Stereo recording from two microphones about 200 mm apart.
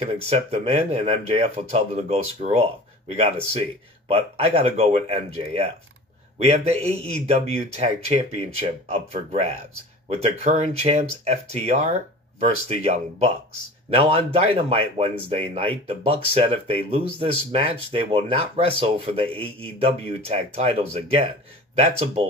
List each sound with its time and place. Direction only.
0.3 s speech: 30° right (ahead or behind)